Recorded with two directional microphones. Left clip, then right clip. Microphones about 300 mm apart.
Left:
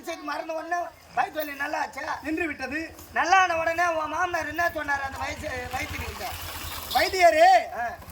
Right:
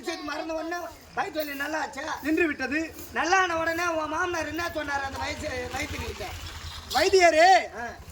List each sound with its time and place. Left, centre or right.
0.3 s a man's voice: centre
6.9 s a man's voice: centre